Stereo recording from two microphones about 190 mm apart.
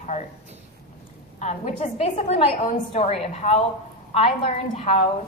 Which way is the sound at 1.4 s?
35° left (ahead or behind).